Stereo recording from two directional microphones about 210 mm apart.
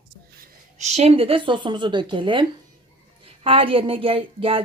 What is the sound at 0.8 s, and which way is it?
A woman's voice, 30° right (ahead or behind).